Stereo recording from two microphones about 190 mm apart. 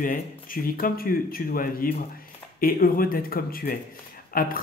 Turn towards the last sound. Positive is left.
turn(degrees=50)  # may be behind; listen again after turning